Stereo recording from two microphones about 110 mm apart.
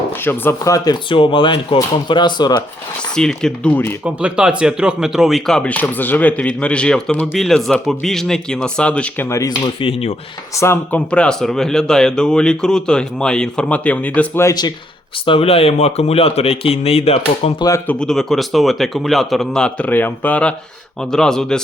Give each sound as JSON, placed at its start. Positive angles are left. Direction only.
{"t": 0.2, "sound": "speech", "side_deg": 20}
{"t": 1.1, "sound": "speech", "side_deg": 50}
{"t": 3.2, "sound": "speech", "side_deg": 5}
{"t": 4.0, "sound": "speech", "side_deg": -10}
{"t": 9.8, "sound": "speech", "side_deg": 55}
{"t": 10.5, "sound": "speech", "side_deg": 25}
{"t": 10.9, "sound": "speech", "side_deg": 10}
{"t": 14.4, "sound": "speech", "side_deg": 40}
{"t": 15.3, "sound": "speech", "side_deg": 60}
{"t": 17.8, "sound": "speech", "side_deg": 5}